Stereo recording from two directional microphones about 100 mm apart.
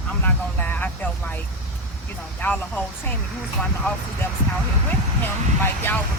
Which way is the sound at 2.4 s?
20° left (ahead or behind).